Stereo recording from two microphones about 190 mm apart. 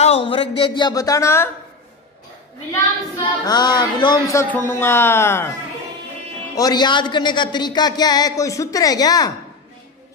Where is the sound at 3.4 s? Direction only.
20° left (ahead or behind).